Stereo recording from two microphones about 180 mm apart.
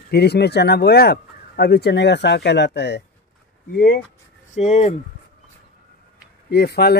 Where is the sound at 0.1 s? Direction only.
65° left (ahead or behind).